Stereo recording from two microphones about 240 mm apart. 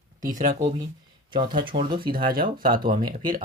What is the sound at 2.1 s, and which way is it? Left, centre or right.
Speech, right.